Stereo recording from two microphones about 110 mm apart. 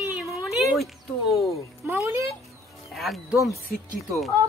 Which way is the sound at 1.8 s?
25° right (ahead or behind).